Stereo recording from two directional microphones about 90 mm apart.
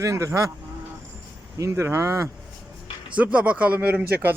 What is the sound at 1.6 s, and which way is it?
Speech, 30° right (ahead or behind).